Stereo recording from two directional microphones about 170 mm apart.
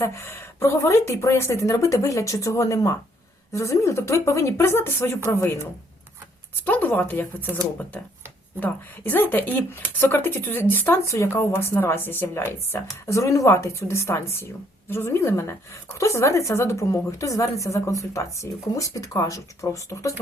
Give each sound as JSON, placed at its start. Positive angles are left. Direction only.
{"t": 0.0, "sound": "speech", "side_deg": 15}
{"t": 6.7, "sound": "speech", "side_deg": 10}
{"t": 8.6, "sound": "speech", "side_deg": 10}